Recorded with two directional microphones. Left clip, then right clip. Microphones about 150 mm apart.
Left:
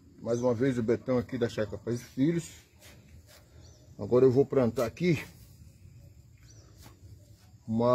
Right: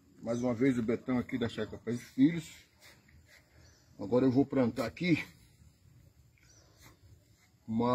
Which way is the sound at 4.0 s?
55° left (ahead or behind).